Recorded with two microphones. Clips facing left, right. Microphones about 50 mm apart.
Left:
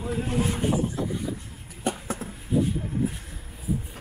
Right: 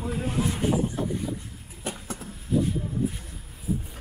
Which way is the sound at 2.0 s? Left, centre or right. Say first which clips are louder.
Left 4 dB; left.